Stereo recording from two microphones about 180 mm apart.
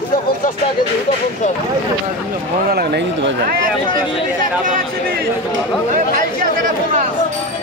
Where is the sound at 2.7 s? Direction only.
60° right (ahead or behind).